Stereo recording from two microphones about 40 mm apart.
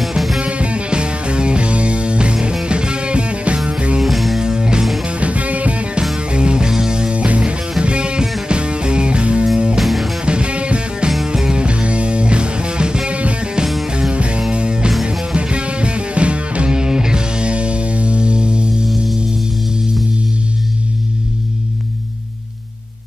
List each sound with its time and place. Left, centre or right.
0.4 s music: right
4.0 s music: centre
4.4 s music: centre
5.0 s music: right
6.1 s music: right
7.2 s music: right
9.8 s music: centre
10.2 s music: right
16.7 s music: centre